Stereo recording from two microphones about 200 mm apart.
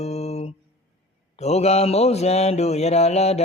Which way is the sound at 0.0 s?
30° left (ahead or behind).